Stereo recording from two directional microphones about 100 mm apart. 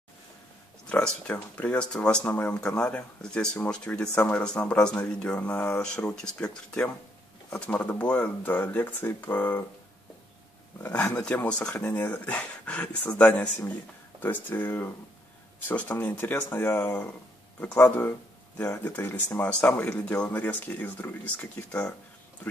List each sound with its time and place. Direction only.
0.8 s speech: 10° left (ahead or behind)
4.1 s speech: 25° left (ahead or behind)
4.4 s speech: 10° left (ahead or behind)
10.8 s speech: 15° left (ahead or behind)
15.9 s speech: 20° left (ahead or behind)